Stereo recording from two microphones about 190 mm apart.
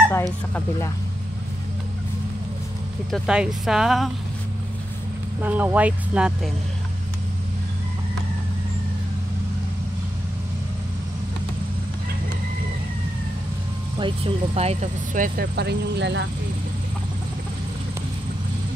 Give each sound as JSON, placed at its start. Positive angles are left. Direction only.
{"t": 0.1, "sound": "speech", "side_deg": 15}
{"t": 3.1, "sound": "speech", "side_deg": -5}
{"t": 5.4, "sound": "speech", "side_deg": -10}
{"t": 13.9, "sound": "speech", "side_deg": -25}